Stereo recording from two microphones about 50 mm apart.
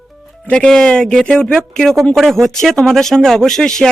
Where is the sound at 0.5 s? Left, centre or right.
Centre.